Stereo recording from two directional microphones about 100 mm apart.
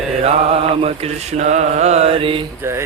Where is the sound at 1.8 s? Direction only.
90° right; by 2.4 s 65° right (ahead or behind).